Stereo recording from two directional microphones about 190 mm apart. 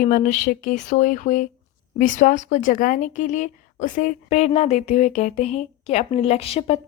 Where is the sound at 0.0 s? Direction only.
45° left (ahead or behind).